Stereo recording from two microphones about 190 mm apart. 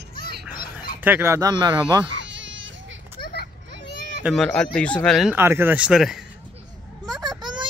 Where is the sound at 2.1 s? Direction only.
75° right (ahead or behind).